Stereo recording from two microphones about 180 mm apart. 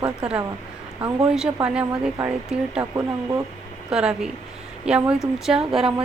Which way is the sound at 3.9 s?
5° right (ahead or behind).